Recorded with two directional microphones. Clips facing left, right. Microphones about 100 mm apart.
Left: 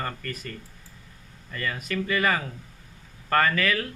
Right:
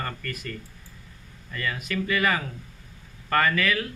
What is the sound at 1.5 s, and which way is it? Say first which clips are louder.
Speech: even; 35° left (ahead or behind).